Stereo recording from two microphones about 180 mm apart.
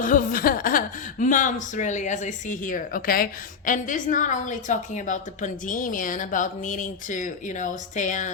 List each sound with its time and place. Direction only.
0.0 s a woman's voice: 50° left (ahead or behind)